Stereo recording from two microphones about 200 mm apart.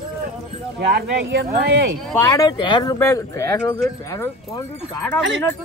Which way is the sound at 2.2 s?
20° left (ahead or behind).